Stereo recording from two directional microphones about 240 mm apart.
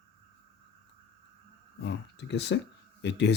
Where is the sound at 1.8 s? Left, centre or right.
Left.